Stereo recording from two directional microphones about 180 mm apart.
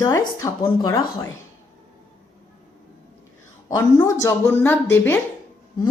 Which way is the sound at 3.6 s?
15° left (ahead or behind).